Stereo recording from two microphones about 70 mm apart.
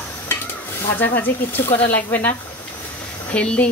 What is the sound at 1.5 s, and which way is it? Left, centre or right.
Speech, left.